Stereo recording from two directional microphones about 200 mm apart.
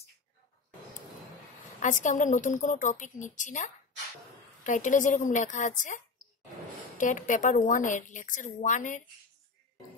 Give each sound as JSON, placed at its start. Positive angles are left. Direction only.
{"t": 1.8, "sound": "a woman's voice", "side_deg": 40}